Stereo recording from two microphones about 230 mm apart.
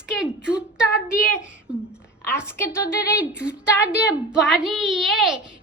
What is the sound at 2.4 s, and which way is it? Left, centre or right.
Speech, centre.